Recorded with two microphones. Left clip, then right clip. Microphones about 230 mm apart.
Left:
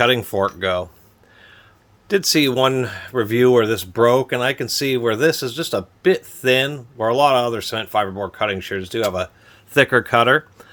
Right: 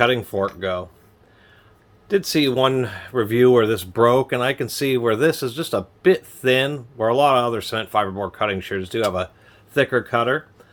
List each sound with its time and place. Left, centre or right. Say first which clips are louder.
0.0 s speech: left 2 dB; left
2.0 s speech: left 2 dB; left; by 9.3 s centre
9.7 s speech: left 4 dB; left